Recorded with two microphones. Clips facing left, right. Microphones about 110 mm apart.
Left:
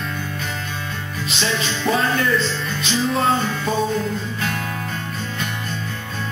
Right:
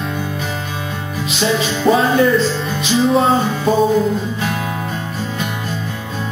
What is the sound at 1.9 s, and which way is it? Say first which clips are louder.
Music: right 7 dB; 35° right (ahead or behind).